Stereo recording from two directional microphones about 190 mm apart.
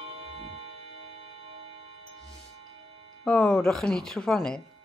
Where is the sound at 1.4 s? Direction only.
30° right (ahead or behind).